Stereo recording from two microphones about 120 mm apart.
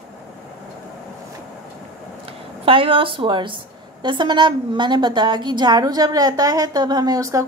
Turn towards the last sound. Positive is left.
turn(degrees=-30)  # may be behind; listen again after turning